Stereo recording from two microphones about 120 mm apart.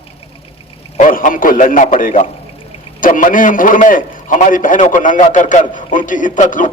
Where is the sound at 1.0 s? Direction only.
90° left.